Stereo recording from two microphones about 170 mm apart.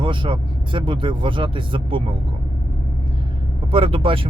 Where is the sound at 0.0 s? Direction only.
30° right (ahead or behind).